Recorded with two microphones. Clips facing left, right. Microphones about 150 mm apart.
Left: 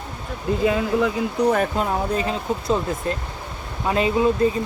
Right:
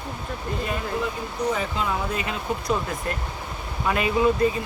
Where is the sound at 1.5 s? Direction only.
50° left (ahead or behind); by 4.3 s 25° left (ahead or behind).